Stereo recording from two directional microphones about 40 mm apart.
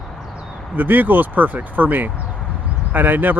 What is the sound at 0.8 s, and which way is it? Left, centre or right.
Speech, right.